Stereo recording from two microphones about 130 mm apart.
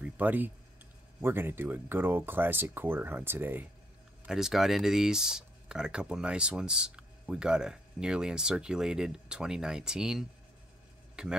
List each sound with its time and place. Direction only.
0.0 s a sound: 15° right (ahead or behind)
1.2 s speech: 15° right (ahead or behind)
4.3 s speech: 5° right (ahead or behind)